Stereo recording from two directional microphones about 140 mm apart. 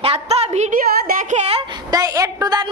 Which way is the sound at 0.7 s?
85° right.